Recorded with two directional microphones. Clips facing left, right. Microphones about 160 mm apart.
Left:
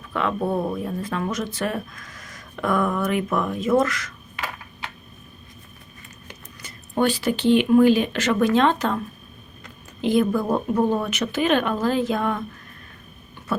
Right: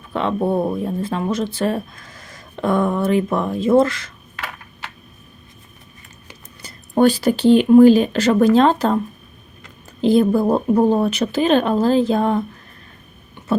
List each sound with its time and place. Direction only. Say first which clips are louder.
0.1 s speech: right 4 dB; 30° right (ahead or behind)
6.6 s speech: right 7 dB; 35° right (ahead or behind)
10.0 s speech: right 5 dB; 35° right (ahead or behind)